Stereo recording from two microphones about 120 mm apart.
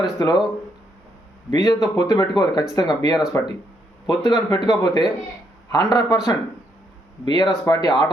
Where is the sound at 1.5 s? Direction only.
30° left (ahead or behind).